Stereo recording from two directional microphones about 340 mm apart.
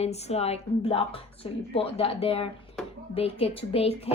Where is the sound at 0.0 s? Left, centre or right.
Centre.